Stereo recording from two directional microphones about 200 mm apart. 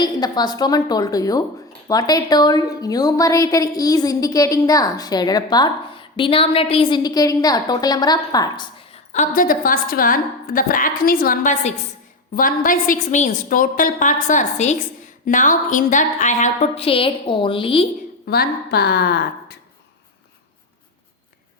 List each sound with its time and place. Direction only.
0.0 s a woman's voice: 20° left (ahead or behind)
9.2 s a woman's voice: 45° left (ahead or behind); by 17.8 s 25° left (ahead or behind)
18.3 s a woman's voice: 50° left (ahead or behind)